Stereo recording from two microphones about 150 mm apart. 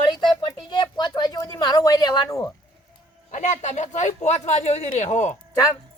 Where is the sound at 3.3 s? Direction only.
50° left (ahead or behind).